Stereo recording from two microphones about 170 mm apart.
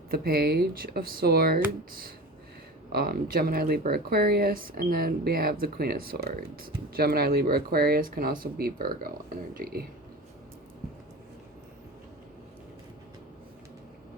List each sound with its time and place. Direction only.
0.1 s speech: 65° right (ahead or behind)